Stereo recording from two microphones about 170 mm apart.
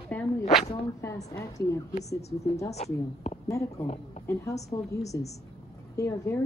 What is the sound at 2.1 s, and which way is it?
A woman's voice, 40° left (ahead or behind).